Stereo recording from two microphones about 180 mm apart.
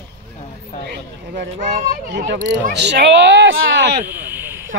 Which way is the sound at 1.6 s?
45° right (ahead or behind).